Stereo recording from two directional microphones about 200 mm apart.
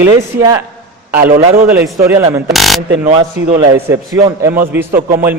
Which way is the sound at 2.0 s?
15° right (ahead or behind).